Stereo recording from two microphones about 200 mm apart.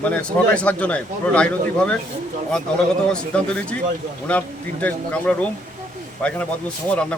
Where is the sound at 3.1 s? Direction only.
5° left (ahead or behind).